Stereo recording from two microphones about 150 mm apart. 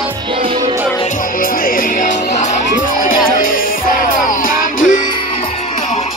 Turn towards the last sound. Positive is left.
turn(degrees=65)  # may be behind; listen again after turning